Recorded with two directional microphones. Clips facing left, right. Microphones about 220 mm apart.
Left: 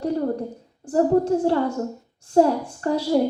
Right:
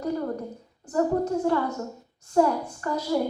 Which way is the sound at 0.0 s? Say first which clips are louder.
Left 5 dB; 30° left (ahead or behind).